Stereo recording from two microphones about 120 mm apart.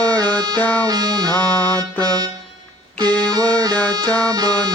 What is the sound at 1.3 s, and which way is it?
Music, 10° left (ahead or behind).